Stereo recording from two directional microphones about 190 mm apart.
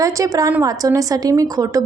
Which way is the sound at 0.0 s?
15° right (ahead or behind).